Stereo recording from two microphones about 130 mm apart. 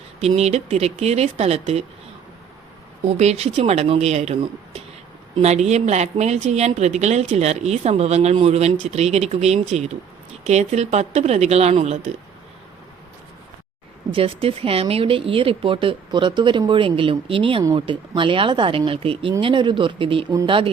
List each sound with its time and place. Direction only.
0.2 s speech: 55° right (ahead or behind)
3.1 s speech: 55° right (ahead or behind)
14.1 s speech: 45° right (ahead or behind)